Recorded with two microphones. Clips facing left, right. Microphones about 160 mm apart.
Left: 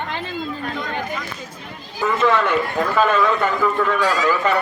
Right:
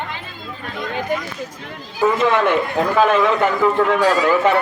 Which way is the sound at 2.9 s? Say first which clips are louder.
Right 2 dB; 15° right (ahead or behind).